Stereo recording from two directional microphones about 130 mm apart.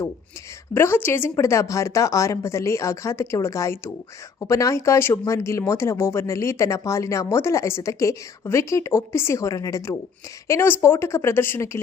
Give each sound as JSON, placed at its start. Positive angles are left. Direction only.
{"t": 0.7, "sound": "speech", "side_deg": 20}